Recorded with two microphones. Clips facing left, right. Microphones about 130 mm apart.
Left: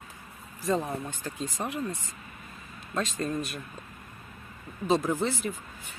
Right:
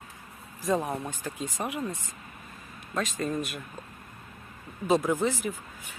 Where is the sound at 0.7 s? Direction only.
15° right (ahead or behind).